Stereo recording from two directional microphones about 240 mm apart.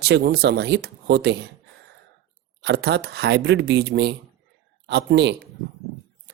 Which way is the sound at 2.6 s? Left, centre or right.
Right.